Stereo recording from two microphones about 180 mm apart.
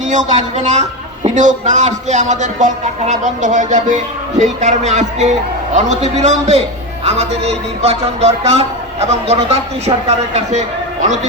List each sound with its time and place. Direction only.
0.0 s a man's voice: 45° right (ahead or behind)